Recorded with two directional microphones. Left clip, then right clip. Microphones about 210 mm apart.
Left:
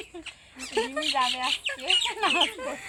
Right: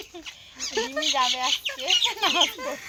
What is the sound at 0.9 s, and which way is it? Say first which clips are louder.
Speech: right 4 dB; 40° right (ahead or behind).